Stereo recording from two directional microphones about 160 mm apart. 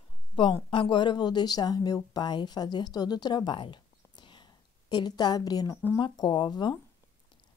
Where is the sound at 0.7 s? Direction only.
30° left (ahead or behind).